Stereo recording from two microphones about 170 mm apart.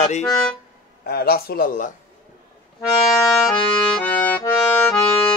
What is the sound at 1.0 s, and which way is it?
Speech, 65° left (ahead or behind).